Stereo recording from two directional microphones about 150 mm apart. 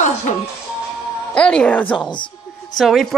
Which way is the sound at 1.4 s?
5° left (ahead or behind).